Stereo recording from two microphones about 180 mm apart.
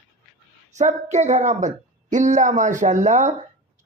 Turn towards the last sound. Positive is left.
turn(degrees=-40)  # may be behind; listen again after turning